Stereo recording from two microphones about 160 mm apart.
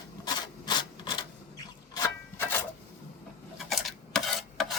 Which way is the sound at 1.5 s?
20° left (ahead or behind).